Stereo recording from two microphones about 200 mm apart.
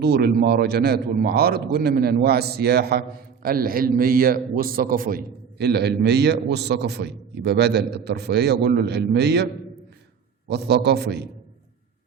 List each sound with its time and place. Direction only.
0.0 s a man's voice: 55° right (ahead or behind)
10.5 s a man's voice: 55° right (ahead or behind)